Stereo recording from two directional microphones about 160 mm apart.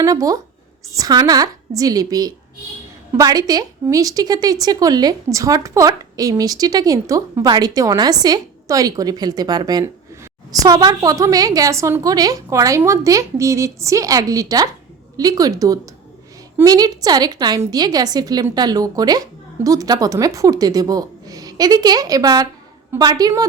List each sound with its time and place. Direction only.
0.0 s a woman's voice: 20° right (ahead or behind)